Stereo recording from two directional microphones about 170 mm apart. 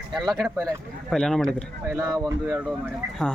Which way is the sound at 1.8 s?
15° right (ahead or behind).